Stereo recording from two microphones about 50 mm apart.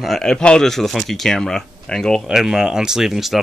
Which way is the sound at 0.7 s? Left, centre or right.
Centre.